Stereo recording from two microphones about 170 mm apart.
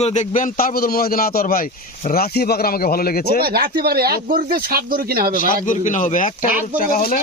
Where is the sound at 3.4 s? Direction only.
65° right (ahead or behind).